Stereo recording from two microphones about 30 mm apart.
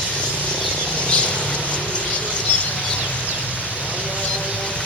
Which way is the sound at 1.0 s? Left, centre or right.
Left.